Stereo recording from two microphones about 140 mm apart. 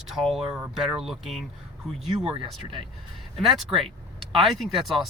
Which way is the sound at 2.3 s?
35° right (ahead or behind).